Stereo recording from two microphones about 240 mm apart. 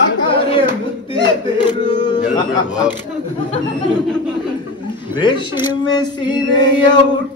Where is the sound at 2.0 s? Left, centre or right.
Centre.